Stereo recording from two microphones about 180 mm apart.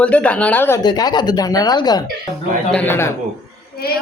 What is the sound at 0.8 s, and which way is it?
Speech, 20° left (ahead or behind).